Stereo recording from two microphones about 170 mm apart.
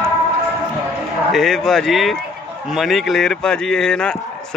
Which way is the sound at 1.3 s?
Centre (ahead or behind).